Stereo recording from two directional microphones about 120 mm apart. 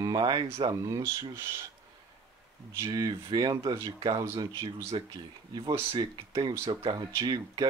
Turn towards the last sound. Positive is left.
turn(degrees=-35)  # may be behind; listen again after turning